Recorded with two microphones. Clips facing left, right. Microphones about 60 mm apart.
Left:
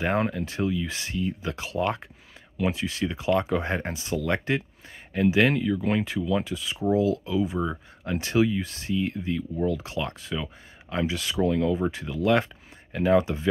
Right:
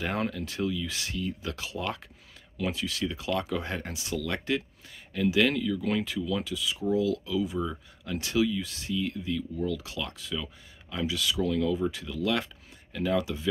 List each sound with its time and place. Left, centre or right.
0.0 s speech: left